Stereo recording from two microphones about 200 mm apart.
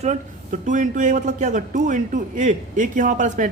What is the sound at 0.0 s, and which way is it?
Speech, 35° right (ahead or behind).